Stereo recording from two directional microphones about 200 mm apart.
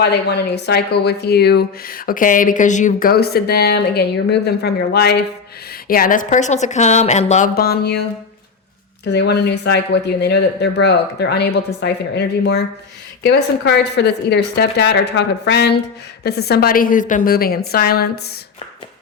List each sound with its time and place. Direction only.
0.0 s speech: 55° left (ahead or behind)
5.9 s a woman's voice: 45° left (ahead or behind)
9.0 s speech: 60° left (ahead or behind)